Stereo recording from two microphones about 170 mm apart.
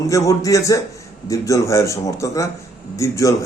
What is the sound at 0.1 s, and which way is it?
A man's voice, 20° left (ahead or behind).